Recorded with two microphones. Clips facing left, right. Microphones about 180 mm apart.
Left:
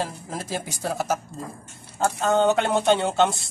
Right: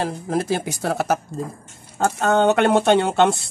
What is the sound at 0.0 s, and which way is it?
Speech, 65° right (ahead or behind).